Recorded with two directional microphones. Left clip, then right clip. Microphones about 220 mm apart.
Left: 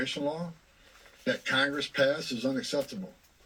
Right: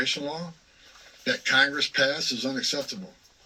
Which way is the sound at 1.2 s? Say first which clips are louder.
Right 6 dB; centre (ahead or behind).